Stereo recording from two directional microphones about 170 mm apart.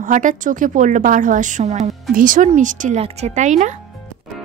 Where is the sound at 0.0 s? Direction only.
50° right (ahead or behind).